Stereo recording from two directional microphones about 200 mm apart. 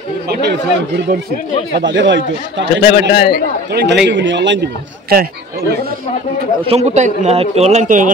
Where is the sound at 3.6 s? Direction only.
55° right (ahead or behind).